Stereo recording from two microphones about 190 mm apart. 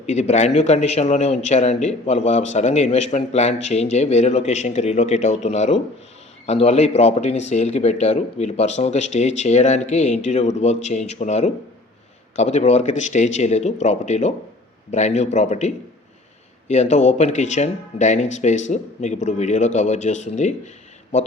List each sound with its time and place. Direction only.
0.0 s a man's voice: 35° left (ahead or behind)